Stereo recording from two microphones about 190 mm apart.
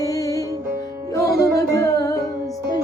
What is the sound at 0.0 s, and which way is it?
Music, 15° left (ahead or behind).